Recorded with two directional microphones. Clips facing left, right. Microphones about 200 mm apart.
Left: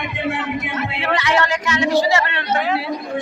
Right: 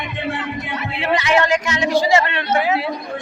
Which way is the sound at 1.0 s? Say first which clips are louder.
Right 3 dB; 15° right (ahead or behind).